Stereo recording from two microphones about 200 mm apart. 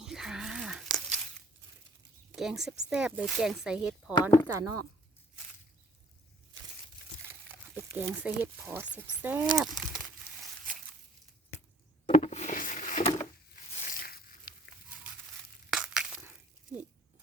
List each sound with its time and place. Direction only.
0.0 s a sound: 5° right (ahead or behind)
2.3 s speech: centre (ahead or behind)
4.1 s speech: 15° left (ahead or behind)
4.4 s speech: 15° right (ahead or behind)
7.4 s crumpling: 10° right (ahead or behind)
8.1 s speech: 10° right (ahead or behind)
12.0 s a sound: 35° left (ahead or behind)
13.7 s a sound: 45° left (ahead or behind)
15.7 s crushing: 5° right (ahead or behind)